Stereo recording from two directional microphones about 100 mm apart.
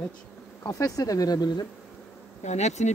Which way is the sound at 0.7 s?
35° left (ahead or behind).